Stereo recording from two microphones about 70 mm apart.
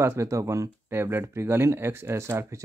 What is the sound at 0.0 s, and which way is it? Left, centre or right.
Speech, right.